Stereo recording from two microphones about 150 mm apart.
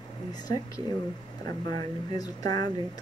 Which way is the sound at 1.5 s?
25° left (ahead or behind).